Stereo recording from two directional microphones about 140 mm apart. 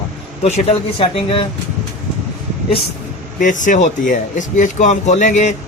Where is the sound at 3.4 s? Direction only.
65° left (ahead or behind).